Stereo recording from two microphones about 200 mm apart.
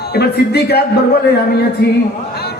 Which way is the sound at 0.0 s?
50° left (ahead or behind).